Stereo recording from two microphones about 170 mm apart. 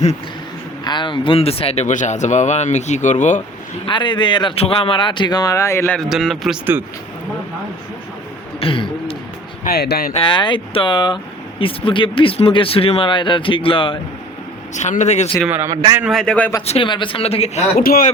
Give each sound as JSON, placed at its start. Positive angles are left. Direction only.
{"t": 0.9, "sound": "speech", "side_deg": 25}
{"t": 3.8, "sound": "a man's voice", "side_deg": 25}
{"t": 6.0, "sound": "a man's voice", "side_deg": 0}
{"t": 8.6, "sound": "speech", "side_deg": 30}
{"t": 9.6, "sound": "speech", "side_deg": 70}
{"t": 10.1, "sound": "a man's voice", "side_deg": 30}
{"t": 14.8, "sound": "speech", "side_deg": 45}
{"t": 15.4, "sound": "a man's voice", "side_deg": -10}
{"t": 15.7, "sound": "a man's voice", "side_deg": -20}
{"t": 16.0, "sound": "a man's voice", "side_deg": 0}
{"t": 16.6, "sound": "speech", "side_deg": 30}
{"t": 17.7, "sound": "speech", "side_deg": 60}